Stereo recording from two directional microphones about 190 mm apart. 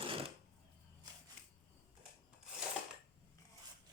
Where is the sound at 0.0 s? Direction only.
30° right (ahead or behind).